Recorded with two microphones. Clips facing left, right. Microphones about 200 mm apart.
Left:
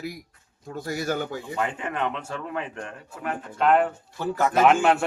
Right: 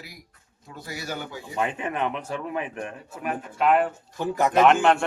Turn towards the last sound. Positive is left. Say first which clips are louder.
# right 1 dB
turn(degrees=5)  # may be behind; listen again after turning